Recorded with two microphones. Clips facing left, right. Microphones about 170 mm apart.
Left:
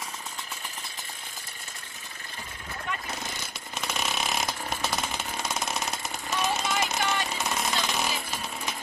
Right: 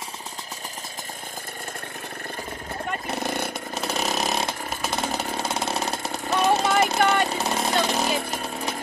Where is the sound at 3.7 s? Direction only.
35° right (ahead or behind).